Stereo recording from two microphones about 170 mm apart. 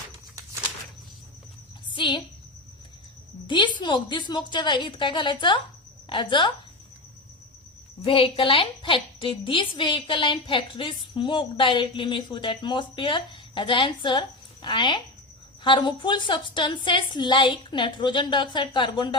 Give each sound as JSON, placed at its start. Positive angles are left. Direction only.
{"t": 1.9, "sound": "a woman's voice", "side_deg": 30}
{"t": 3.4, "sound": "a woman's voice", "side_deg": 25}
{"t": 8.0, "sound": "a woman's voice", "side_deg": 30}